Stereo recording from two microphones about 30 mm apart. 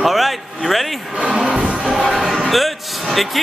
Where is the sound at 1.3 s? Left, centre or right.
Right.